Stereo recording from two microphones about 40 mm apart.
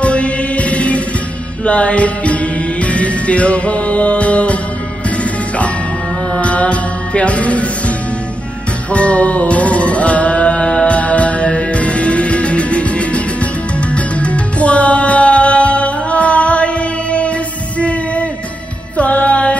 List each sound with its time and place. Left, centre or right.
0.0 s music: left
6.3 s music: left
8.9 s music: left
17.7 s a sound: left
18.9 s music: left